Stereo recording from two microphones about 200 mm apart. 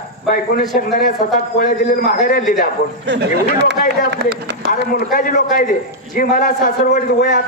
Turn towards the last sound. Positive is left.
turn(degrees=40)  # may be behind; listen again after turning